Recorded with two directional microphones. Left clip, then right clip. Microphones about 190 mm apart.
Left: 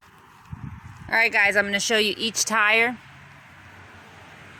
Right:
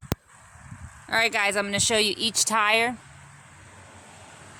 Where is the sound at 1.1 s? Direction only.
Centre (ahead or behind).